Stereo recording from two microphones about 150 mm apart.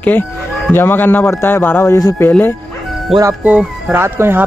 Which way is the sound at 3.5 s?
10° right (ahead or behind).